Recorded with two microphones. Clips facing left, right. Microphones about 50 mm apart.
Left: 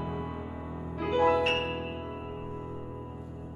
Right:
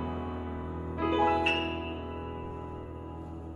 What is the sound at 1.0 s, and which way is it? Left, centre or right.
Music, centre.